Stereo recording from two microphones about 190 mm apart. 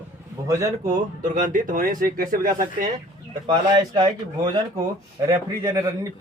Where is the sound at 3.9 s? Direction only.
25° right (ahead or behind).